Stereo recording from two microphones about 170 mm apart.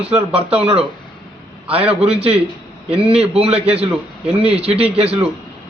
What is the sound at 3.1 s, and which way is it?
Speech, 35° right (ahead or behind).